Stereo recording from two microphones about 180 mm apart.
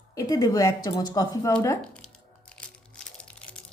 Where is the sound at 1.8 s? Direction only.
5° left (ahead or behind).